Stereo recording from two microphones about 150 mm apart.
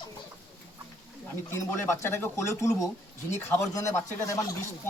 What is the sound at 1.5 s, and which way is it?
A man's voice, 20° left (ahead or behind).